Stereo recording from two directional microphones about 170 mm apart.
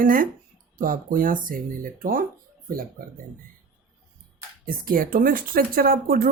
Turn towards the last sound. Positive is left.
turn(degrees=-60)  # may be behind; listen again after turning